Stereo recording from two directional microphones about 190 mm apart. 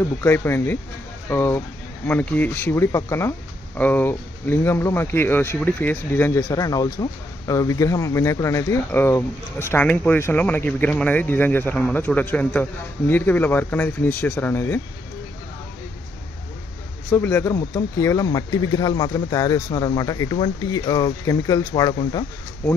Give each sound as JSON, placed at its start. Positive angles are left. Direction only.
{"t": 0.0, "sound": "speech", "side_deg": 10}
{"t": 17.1, "sound": "speech", "side_deg": 10}